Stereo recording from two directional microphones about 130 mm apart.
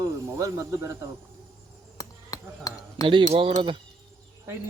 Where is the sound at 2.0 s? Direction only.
25° left (ahead or behind).